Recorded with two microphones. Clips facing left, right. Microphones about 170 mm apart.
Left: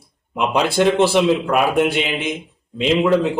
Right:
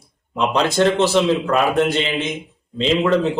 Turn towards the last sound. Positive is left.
turn(degrees=10)  # may be behind; listen again after turning